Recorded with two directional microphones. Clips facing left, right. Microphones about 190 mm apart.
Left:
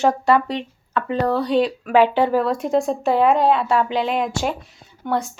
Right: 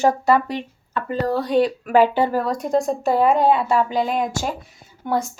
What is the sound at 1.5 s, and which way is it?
Speech, 45° right (ahead or behind).